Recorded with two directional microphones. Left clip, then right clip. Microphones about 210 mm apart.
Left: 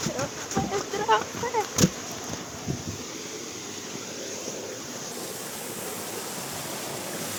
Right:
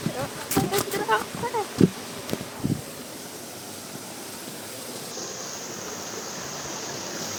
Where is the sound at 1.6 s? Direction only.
Centre (ahead or behind).